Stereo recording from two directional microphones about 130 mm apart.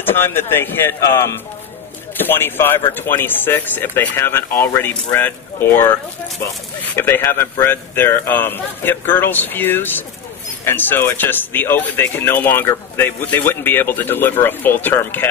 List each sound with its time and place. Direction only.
0.0 s speech: 15° left (ahead or behind)